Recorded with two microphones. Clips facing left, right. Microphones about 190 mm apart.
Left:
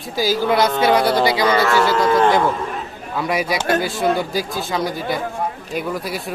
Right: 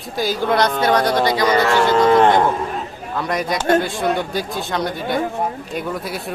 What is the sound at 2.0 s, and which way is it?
Speech, 25° right (ahead or behind).